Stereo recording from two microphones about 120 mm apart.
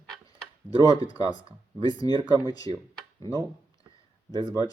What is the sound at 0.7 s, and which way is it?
Speech, 35° left (ahead or behind).